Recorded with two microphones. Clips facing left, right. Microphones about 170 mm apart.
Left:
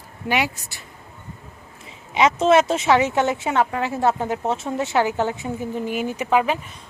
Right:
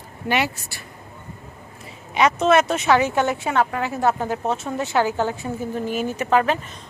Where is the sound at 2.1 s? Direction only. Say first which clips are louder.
Left 1 dB; 25° left (ahead or behind).